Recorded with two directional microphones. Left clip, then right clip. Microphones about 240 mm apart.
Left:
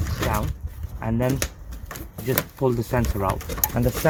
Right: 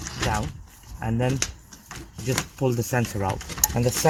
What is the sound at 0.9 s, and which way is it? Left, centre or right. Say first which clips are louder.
Speech: left 2 dB; right.